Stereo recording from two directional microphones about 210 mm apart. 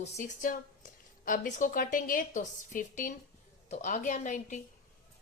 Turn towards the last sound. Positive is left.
turn(degrees=35)  # may be behind; listen again after turning